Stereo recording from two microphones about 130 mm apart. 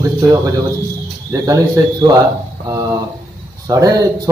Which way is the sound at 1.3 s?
25° right (ahead or behind).